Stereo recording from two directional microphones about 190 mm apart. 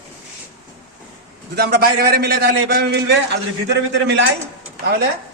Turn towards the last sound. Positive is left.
turn(degrees=-55)  # may be behind; listen again after turning